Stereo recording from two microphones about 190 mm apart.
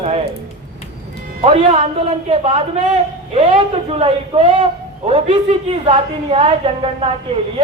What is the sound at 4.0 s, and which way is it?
A man's voice, 30° right (ahead or behind).